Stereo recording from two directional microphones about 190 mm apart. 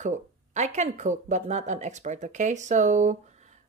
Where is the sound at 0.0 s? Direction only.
40° right (ahead or behind).